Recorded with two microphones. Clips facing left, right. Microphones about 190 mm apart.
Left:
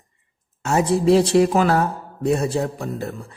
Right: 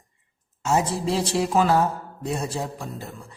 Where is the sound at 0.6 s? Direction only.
60° left (ahead or behind).